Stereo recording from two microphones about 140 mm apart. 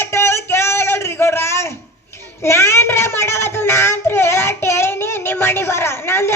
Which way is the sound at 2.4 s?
20° left (ahead or behind).